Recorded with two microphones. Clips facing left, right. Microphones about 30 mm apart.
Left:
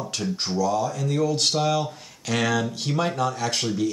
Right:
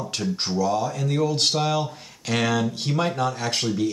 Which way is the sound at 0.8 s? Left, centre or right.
Centre.